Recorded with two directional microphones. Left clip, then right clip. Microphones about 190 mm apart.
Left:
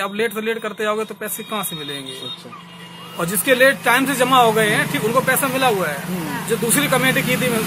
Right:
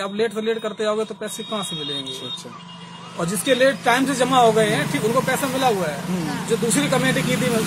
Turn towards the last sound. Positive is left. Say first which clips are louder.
# left 3 dB
turn(degrees=0)  # may be behind; listen again after turning